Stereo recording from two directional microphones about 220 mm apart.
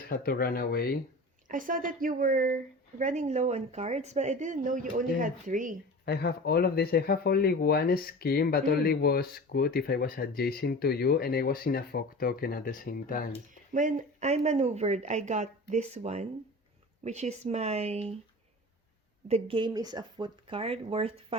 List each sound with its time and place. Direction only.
0.1 s speech: 40° left (ahead or behind)
1.5 s speech: 35° right (ahead or behind)
6.1 s speech: 45° left (ahead or behind)
13.7 s speech: 35° right (ahead or behind)
19.3 s speech: 25° right (ahead or behind)